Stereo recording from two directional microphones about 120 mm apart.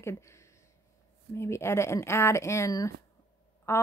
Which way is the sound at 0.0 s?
25° left (ahead or behind).